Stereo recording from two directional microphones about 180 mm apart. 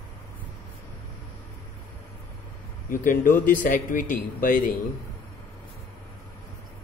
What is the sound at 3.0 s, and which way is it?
A man's voice, 50° left (ahead or behind).